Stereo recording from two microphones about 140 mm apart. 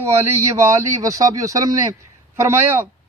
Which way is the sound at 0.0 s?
20° right (ahead or behind).